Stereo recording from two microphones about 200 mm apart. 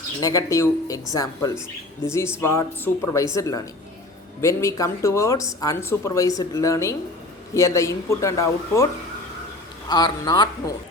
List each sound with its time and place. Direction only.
0.2 s speech: 15° left (ahead or behind)
9.9 s a man's voice: 20° left (ahead or behind)